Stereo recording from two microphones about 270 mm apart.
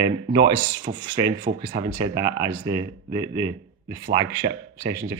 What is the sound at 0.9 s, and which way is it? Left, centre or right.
Speech, right.